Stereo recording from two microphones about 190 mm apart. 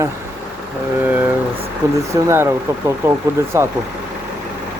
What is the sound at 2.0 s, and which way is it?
Speech, 15° right (ahead or behind).